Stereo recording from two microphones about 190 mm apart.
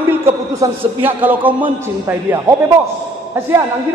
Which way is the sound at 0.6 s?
10° right (ahead or behind).